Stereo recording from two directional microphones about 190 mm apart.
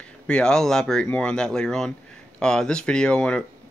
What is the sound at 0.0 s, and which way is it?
Speech, 5° left (ahead or behind).